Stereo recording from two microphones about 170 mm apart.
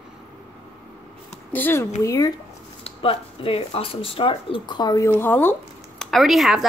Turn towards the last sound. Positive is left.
turn(degrees=0)  # may be behind; listen again after turning